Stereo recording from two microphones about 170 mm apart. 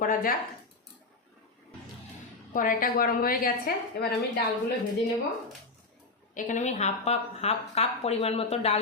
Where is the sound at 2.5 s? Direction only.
55° left (ahead or behind).